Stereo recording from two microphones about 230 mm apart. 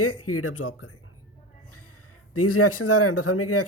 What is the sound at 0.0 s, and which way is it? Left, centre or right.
Speech, left.